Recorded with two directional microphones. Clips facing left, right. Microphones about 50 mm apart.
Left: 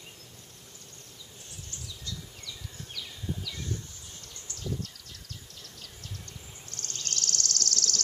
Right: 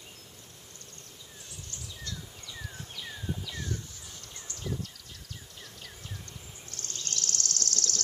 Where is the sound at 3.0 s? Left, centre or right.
Right.